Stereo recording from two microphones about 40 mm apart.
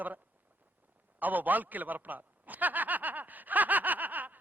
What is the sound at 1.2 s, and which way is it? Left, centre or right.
A man's voice, right.